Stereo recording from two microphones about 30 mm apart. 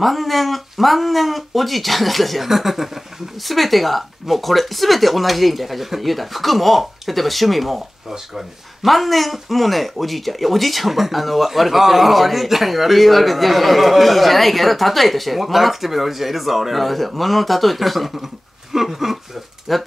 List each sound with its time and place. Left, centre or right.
0.0 s speech: centre
19.7 s speech: centre